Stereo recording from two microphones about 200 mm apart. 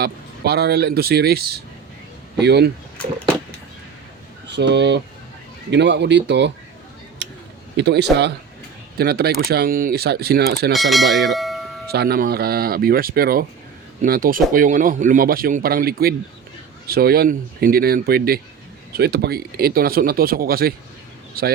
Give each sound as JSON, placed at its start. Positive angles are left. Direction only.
{"t": 0.0, "sound": "speech", "side_deg": -50}
{"t": 4.5, "sound": "speech", "side_deg": -60}
{"t": 7.8, "sound": "speech", "side_deg": -55}
{"t": 10.7, "sound": "speech", "side_deg": 0}
{"t": 11.9, "sound": "speech", "side_deg": -50}